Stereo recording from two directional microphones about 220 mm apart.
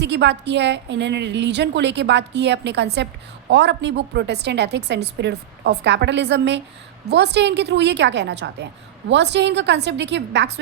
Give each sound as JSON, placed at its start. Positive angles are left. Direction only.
{"t": 0.0, "sound": "a woman's voice", "side_deg": -50}